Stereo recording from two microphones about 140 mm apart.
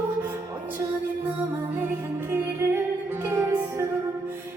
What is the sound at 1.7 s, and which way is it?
Music, 15° right (ahead or behind).